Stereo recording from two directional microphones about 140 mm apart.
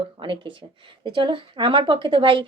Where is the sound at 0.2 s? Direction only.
35° right (ahead or behind).